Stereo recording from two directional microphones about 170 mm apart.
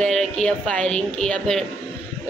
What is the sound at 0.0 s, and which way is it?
A woman's voice, 5° left (ahead or behind).